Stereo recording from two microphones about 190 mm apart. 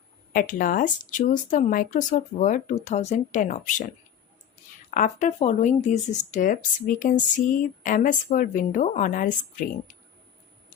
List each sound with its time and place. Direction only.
0.3 s speech: 45° left (ahead or behind)
4.9 s speech: 40° left (ahead or behind)